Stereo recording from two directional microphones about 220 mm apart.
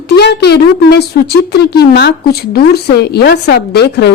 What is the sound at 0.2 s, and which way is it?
A woman's voice, 50° left (ahead or behind).